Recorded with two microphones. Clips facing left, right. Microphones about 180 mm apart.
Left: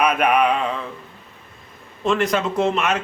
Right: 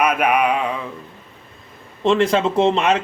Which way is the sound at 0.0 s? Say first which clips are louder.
Even; 5° right (ahead or behind).